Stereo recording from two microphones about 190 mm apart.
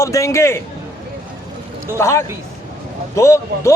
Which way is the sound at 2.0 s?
15° left (ahead or behind).